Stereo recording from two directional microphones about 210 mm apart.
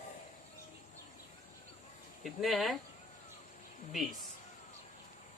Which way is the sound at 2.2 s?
Centre (ahead or behind).